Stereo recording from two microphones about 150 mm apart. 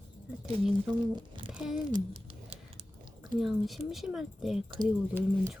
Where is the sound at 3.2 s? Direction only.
Centre (ahead or behind).